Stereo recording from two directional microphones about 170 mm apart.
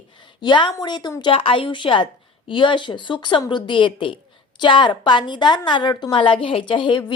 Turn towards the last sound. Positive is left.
turn(degrees=30)  # may be behind; listen again after turning